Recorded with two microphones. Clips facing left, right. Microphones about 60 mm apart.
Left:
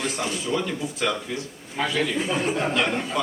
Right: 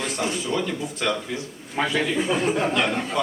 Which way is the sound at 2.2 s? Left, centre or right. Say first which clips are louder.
Right 2 dB; centre.